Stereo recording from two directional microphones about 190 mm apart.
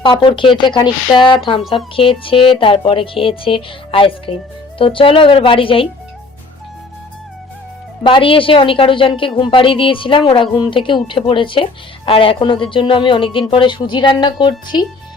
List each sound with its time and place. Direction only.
0.0 s a woman's voice: 25° left (ahead or behind)
8.0 s a woman's voice: 25° left (ahead or behind)